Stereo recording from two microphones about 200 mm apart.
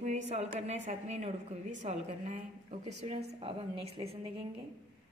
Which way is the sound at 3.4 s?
30° right (ahead or behind).